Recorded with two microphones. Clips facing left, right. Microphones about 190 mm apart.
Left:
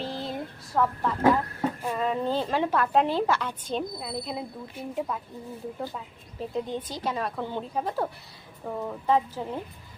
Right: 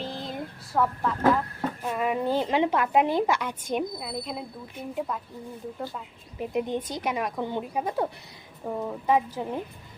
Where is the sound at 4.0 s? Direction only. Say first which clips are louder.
Left 1 dB; centre (ahead or behind).